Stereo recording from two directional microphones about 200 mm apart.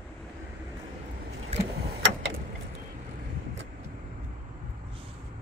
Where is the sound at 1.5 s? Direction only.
35° right (ahead or behind).